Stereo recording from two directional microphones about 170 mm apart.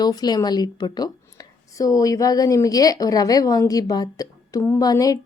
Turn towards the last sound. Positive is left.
turn(degrees=20)  # may be behind; listen again after turning